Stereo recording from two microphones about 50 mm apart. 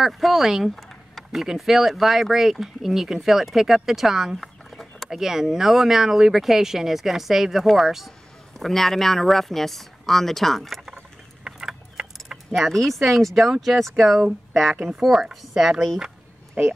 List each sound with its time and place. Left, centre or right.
0.0 s speech: centre
4.4 s speech: centre
11.4 s speech: centre
16.6 s speech: right